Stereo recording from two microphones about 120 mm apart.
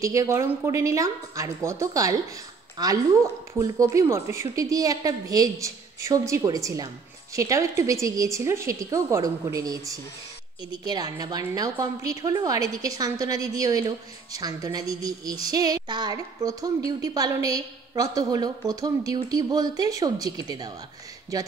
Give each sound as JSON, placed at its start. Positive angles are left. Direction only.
{"t": 0.0, "sound": "a woman's voice", "side_deg": -25}